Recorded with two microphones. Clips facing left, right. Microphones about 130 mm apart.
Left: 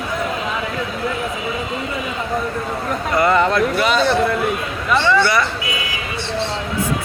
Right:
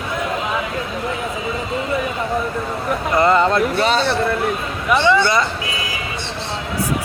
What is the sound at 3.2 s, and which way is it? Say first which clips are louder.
Speech: right 1 dB; 25° right (ahead or behind).